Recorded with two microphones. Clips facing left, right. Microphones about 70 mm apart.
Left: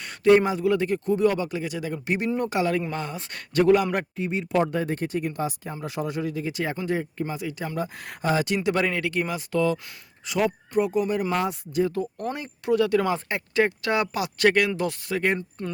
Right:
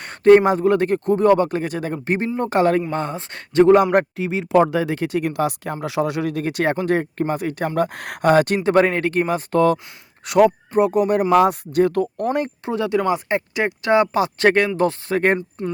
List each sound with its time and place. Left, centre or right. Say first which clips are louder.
0.0 s speech: right 6 dB; right
4.2 s speech: right 7 dB; right
10.2 s speech: right 10 dB; right
10.7 s speech: right 6 dB; right
11.4 s speech: right 8 dB; right
12.1 s speech: right 10 dB; right
12.6 s speech: left 1 dB; right
15.4 s speech: right 6 dB; right